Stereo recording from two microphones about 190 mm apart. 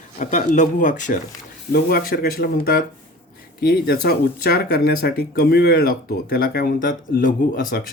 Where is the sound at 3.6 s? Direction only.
55° left (ahead or behind).